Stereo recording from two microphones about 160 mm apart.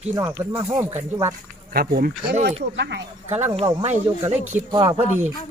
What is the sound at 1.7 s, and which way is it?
Speech, 70° right (ahead or behind).